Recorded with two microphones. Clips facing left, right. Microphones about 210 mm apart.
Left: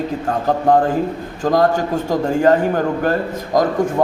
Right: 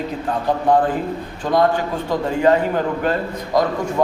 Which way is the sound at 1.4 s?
45° left (ahead or behind).